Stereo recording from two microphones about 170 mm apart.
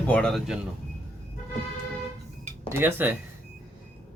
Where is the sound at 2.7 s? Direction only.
15° right (ahead or behind).